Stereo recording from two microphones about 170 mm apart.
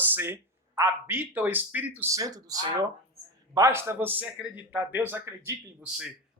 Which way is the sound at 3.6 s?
15° right (ahead or behind).